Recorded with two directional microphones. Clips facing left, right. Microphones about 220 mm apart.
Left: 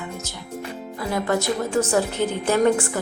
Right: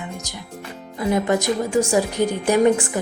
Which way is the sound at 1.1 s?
15° right (ahead or behind).